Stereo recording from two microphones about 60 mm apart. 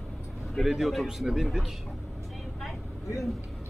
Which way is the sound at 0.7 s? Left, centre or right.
Centre.